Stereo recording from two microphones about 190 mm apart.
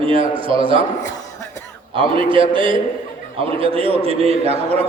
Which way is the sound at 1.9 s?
25° right (ahead or behind).